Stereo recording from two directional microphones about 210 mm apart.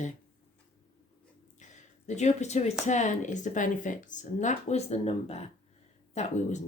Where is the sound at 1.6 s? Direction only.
35° left (ahead or behind).